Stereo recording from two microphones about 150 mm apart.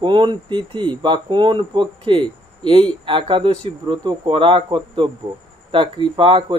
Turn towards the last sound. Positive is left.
turn(degrees=-35)  # may be behind; listen again after turning